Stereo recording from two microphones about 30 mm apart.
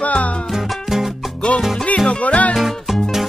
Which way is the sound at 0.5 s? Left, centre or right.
Centre.